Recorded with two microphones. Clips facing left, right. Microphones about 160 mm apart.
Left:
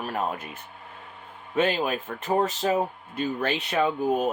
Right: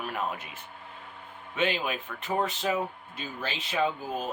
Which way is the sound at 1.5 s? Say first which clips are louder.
Left 5 dB; 45° left (ahead or behind).